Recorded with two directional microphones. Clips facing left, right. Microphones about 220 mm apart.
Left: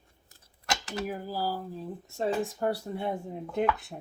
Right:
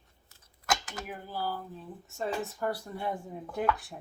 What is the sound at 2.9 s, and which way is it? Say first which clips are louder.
Speech: left 3 dB; 25° left (ahead or behind).